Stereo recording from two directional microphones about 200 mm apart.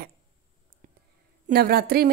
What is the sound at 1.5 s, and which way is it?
Speech, 50° right (ahead or behind).